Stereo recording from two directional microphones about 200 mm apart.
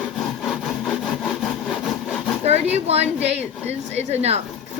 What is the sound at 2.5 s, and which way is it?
Speech, 30° right (ahead or behind).